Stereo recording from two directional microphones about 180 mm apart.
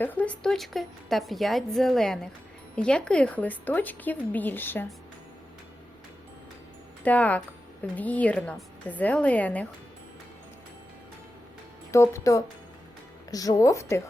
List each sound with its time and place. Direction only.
0.0 s a woman's voice: 10° left (ahead or behind)
7.0 s a woman's voice: 10° left (ahead or behind)
11.9 s a woman's voice: 15° left (ahead or behind)